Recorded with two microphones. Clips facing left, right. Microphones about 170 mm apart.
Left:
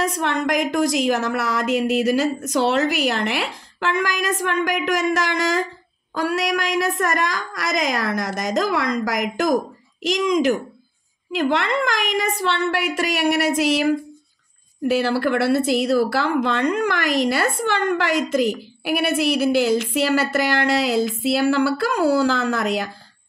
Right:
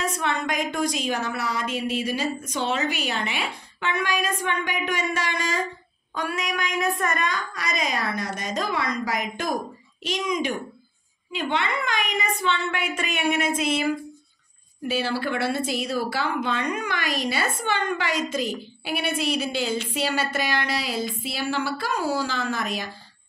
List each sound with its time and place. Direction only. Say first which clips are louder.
0.0 s a woman's voice: left 5 dB; 70° left (ahead or behind)
15.1 s a woman's voice: left 7 dB; 75° left (ahead or behind)